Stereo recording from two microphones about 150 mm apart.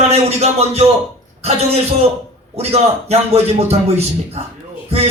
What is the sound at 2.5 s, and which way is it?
Speech, 45° right (ahead or behind).